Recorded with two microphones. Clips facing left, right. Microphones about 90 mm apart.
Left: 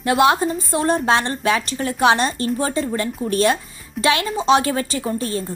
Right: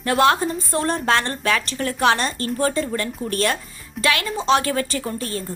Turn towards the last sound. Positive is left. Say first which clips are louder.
# left 4 dB
turn(degrees=20)  # may be behind; listen again after turning